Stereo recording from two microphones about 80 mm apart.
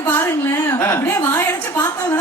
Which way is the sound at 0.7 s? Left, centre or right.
Left.